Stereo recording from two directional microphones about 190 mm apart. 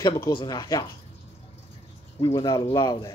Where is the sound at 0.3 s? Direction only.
25° left (ahead or behind).